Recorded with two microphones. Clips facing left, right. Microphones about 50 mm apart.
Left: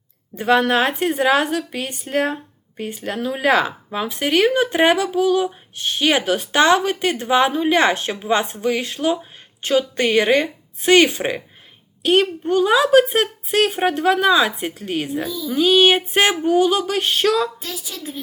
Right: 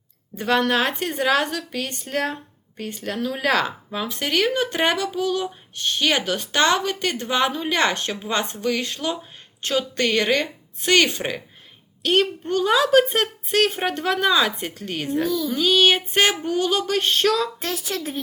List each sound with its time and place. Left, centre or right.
0.3 s speech: centre
17.6 s a woman's voice: right